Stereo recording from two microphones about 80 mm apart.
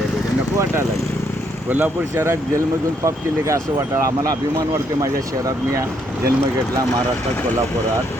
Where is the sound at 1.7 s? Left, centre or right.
Right.